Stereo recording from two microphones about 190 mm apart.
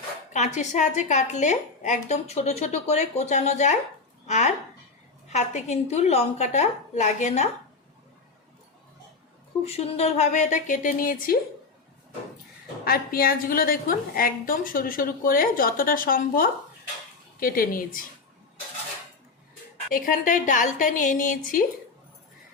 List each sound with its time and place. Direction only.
0.3 s speech: 35° left (ahead or behind)
9.6 s speech: 35° left (ahead or behind)
12.8 s a woman's voice: 50° left (ahead or behind)
19.9 s a woman's voice: 45° left (ahead or behind)